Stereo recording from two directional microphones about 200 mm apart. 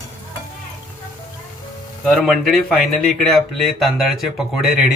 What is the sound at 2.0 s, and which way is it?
Speech, centre (ahead or behind).